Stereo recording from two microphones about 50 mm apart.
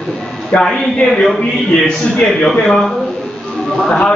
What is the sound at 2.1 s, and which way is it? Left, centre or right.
A man's voice, centre.